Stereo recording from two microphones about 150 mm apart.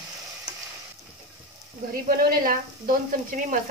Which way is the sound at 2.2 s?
70° right (ahead or behind).